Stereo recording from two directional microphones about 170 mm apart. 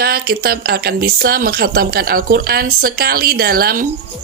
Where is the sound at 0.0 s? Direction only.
65° right (ahead or behind).